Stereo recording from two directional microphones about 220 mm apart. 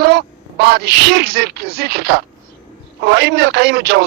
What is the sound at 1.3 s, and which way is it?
Speech, 45° right (ahead or behind).